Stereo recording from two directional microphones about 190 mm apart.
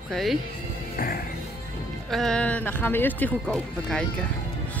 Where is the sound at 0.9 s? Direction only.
50° left (ahead or behind).